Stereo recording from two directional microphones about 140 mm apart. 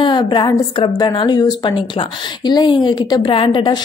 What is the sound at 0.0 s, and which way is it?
A woman's voice, 35° left (ahead or behind).